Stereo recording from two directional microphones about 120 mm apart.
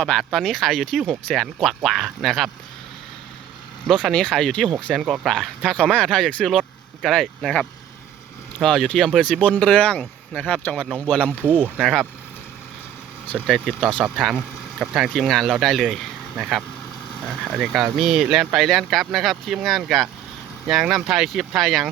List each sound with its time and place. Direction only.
0.0 s speech: 5° left (ahead or behind)
3.8 s speech: 5° left (ahead or behind)
4.9 s speech: 5° right (ahead or behind)
5.3 s speech: 5° left (ahead or behind)
11.3 s speech: 15° right (ahead or behind)
13.2 s speech: 10° left (ahead or behind)
13.5 s speech: 5° right (ahead or behind)